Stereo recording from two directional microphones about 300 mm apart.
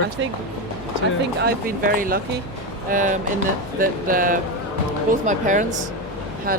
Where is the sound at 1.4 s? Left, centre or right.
Right.